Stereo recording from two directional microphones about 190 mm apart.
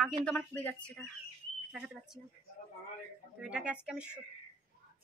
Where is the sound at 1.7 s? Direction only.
5° right (ahead or behind).